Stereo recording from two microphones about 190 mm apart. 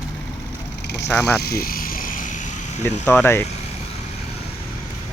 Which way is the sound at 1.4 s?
55° left (ahead or behind).